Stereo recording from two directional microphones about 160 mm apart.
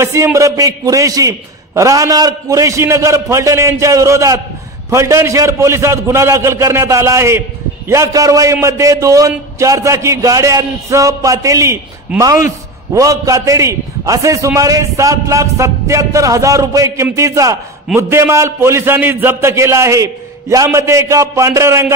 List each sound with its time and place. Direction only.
0.0 s a man's voice: 15° right (ahead or behind)
12.9 s a man's voice: 20° right (ahead or behind)